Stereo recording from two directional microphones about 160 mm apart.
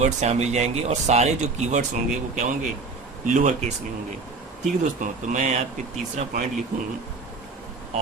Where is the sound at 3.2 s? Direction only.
50° right (ahead or behind).